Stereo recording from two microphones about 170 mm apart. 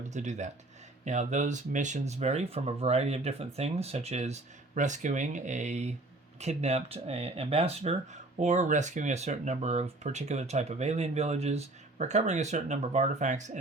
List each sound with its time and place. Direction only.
0.1 s speech: 45° right (ahead or behind)